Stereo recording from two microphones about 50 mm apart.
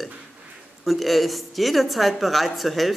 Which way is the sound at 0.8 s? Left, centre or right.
Centre.